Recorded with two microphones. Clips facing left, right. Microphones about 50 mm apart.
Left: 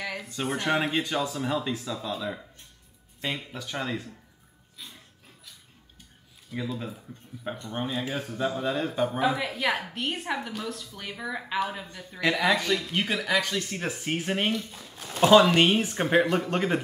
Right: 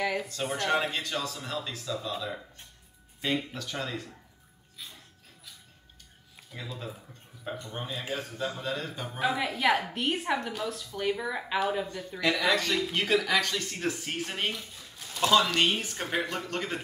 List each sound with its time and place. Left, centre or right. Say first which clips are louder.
0.0 s a sound: right 5 dB; centre
0.6 s speech: left 2 dB; centre
3.5 s speech: left 3 dB; centre
6.5 s speech: left 7 dB; centre
7.7 s speech: left 6 dB; centre
8.9 s speech: left 11 dB; left
9.2 s a woman's voice: right 4 dB; centre
15.2 s speech: left 6 dB; left